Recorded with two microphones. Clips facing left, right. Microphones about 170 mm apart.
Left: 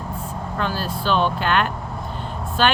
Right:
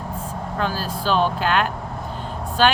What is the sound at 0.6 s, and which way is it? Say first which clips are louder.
Speech: even; 40° right (ahead or behind).